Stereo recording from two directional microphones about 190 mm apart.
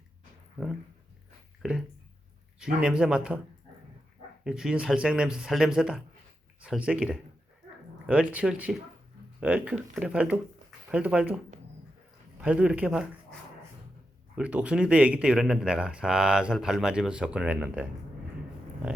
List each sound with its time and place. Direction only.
1.6 s speech: 5° right (ahead or behind)
4.4 s speech: 5° right (ahead or behind)
12.4 s speech: 5° right (ahead or behind)
14.3 s speech: 5° right (ahead or behind)